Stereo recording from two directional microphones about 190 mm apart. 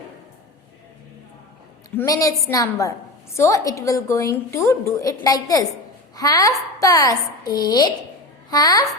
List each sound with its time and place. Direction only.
2.0 s a woman's voice: 20° left (ahead or behind)